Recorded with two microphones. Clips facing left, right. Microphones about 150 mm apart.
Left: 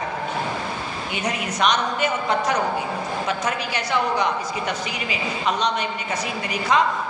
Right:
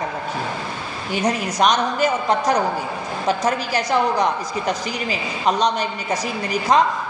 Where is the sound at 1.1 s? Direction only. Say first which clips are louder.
Right 6 dB; 40° right (ahead or behind).